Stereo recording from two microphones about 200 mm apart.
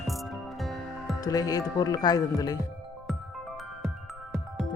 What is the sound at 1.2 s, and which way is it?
Speech, 20° left (ahead or behind).